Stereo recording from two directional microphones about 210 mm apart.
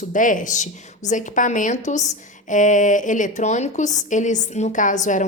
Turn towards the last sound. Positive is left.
turn(degrees=35)  # may be behind; listen again after turning